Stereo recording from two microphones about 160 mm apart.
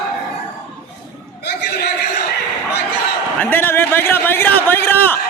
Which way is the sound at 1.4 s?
85° left.